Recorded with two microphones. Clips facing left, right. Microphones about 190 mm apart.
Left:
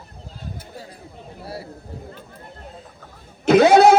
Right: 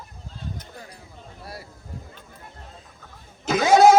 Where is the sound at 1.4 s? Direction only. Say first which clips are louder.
Left 6 dB; 30° left (ahead or behind).